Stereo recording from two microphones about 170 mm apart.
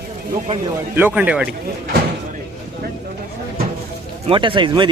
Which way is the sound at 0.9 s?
10° right (ahead or behind).